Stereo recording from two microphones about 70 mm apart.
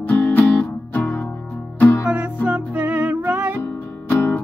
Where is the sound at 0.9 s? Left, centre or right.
Left.